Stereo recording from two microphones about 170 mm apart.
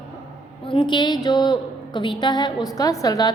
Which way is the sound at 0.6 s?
30° left (ahead or behind).